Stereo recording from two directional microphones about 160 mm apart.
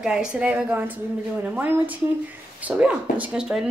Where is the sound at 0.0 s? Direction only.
5° right (ahead or behind).